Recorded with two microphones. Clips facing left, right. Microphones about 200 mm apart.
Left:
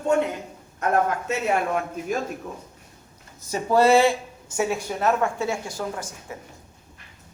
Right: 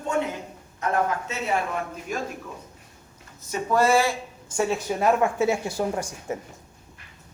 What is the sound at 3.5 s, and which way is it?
Speech, 30° left (ahead or behind).